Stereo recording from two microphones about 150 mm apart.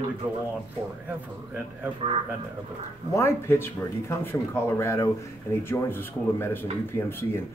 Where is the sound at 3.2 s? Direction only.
15° left (ahead or behind).